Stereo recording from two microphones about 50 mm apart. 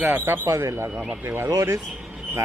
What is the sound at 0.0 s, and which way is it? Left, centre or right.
Speech, right.